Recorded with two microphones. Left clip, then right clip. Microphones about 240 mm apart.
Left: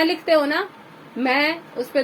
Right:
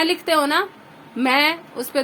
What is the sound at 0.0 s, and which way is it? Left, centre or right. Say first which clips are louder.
A woman's voice: left 1 dB; centre.